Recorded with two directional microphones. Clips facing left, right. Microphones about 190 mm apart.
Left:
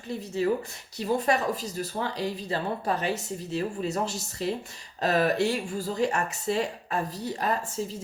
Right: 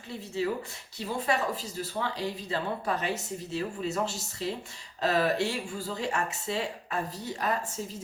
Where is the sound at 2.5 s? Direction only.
35° left (ahead or behind).